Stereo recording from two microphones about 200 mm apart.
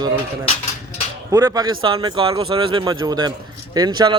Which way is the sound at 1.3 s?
15° right (ahead or behind).